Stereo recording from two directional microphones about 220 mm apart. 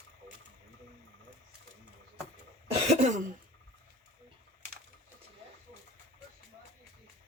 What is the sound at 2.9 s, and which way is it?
Throat clearing, 30° right (ahead or behind).